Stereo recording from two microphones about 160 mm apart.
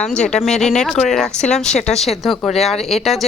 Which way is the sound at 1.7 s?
45° left (ahead or behind).